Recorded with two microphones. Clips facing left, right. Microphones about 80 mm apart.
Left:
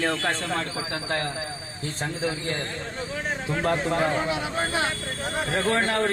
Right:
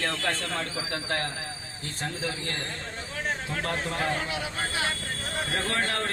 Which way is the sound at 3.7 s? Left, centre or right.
Left.